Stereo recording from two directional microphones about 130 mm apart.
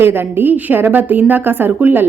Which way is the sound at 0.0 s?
15° right (ahead or behind).